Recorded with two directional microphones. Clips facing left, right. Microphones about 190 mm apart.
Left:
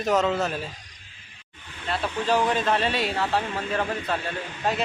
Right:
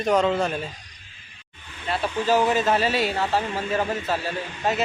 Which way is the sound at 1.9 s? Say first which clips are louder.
Right 2 dB; centre (ahead or behind).